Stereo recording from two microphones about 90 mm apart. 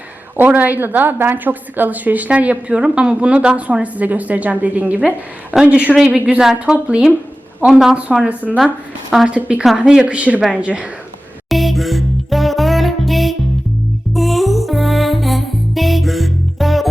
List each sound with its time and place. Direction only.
0.3 s a woman's voice: 20° right (ahead or behind)
11.4 s music: centre (ahead or behind)